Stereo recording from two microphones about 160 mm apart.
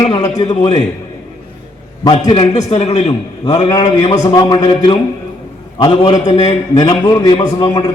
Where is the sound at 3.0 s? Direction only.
25° left (ahead or behind).